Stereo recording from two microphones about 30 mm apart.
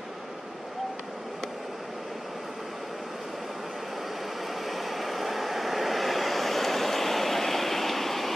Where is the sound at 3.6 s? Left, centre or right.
Centre.